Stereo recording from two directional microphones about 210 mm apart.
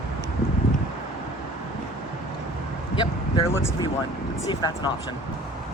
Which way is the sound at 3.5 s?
10° left (ahead or behind).